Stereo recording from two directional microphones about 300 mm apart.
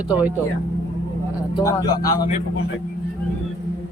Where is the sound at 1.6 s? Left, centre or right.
Centre.